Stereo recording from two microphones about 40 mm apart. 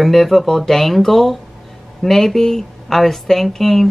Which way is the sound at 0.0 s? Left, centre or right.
Centre.